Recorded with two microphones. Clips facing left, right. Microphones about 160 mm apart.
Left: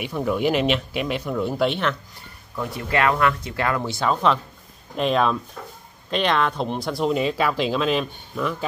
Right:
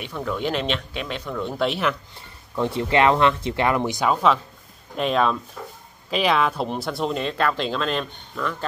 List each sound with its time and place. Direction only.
0.0 s speech: 10° left (ahead or behind)
2.1 s speech: 25° right (ahead or behind)
4.1 s speech: centre (ahead or behind)